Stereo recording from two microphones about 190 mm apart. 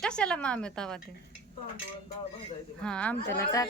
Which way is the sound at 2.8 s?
5° left (ahead or behind).